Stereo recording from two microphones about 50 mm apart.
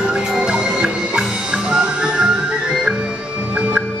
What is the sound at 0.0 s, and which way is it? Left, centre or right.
Music, centre.